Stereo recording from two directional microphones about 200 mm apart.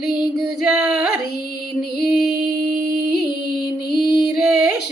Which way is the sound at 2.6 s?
45° right (ahead or behind).